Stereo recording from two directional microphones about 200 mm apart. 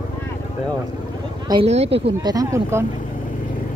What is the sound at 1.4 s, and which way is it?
Speech, 30° right (ahead or behind).